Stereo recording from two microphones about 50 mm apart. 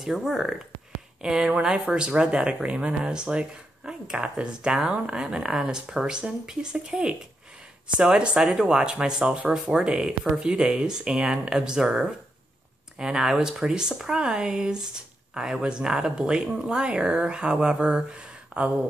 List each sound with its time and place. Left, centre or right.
0.0 s speech: centre; by 18.9 s right